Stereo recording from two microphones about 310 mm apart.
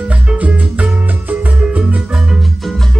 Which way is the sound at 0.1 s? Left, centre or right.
Centre.